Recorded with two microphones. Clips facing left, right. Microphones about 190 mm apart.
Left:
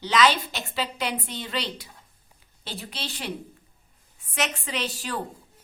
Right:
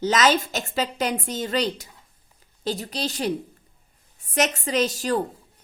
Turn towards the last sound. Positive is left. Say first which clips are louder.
# right 8 dB
turn(degrees=-40)  # may be behind; listen again after turning